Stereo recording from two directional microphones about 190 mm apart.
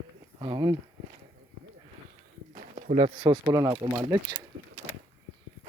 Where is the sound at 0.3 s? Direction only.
25° right (ahead or behind).